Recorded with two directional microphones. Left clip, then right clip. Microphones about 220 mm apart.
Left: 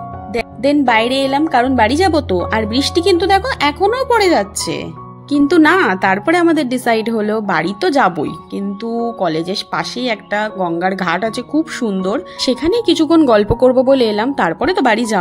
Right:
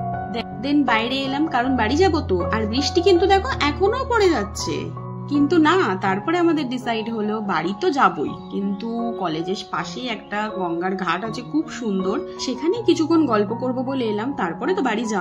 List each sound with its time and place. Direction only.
0.3 s a woman's voice: 35° left (ahead or behind)